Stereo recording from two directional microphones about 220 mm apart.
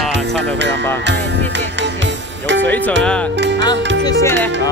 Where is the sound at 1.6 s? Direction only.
55° right (ahead or behind).